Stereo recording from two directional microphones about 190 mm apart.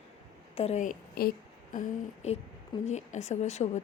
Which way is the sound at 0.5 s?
35° left (ahead or behind).